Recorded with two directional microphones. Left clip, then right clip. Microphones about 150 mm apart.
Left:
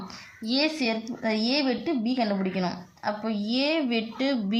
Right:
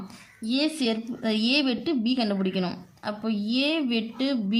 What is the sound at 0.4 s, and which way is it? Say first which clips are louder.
A woman's voice: even; 20° right (ahead or behind).